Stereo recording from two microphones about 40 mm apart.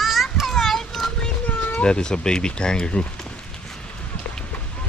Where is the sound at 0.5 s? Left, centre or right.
Centre.